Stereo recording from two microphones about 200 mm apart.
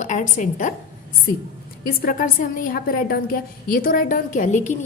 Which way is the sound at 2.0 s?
45° left (ahead or behind).